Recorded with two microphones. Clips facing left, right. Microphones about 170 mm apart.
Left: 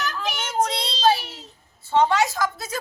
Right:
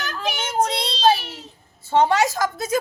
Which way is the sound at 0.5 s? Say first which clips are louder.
Right 1 dB; 25° right (ahead or behind).